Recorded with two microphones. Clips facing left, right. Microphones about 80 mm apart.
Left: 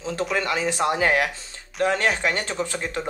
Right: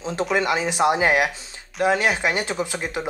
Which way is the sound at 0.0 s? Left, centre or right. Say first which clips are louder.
Right 3 dB; right.